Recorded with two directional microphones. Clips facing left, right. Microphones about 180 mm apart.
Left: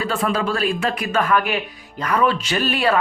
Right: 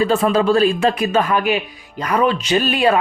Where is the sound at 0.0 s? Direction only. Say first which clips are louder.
Right 6 dB; 25° right (ahead or behind).